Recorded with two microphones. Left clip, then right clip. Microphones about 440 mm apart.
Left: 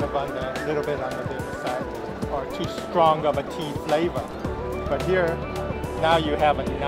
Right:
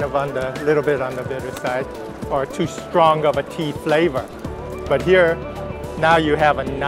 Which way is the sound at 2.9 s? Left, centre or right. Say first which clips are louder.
Right 5 dB; right.